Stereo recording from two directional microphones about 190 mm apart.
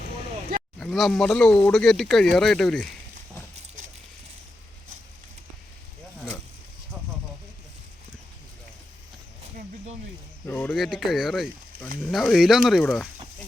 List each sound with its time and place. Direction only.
0.8 s speech: centre (ahead or behind)
10.4 s speech: 10° left (ahead or behind)